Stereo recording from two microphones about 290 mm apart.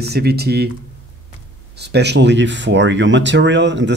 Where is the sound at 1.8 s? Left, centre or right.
Right.